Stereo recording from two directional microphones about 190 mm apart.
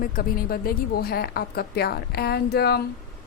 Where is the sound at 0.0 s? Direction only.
50° left (ahead or behind).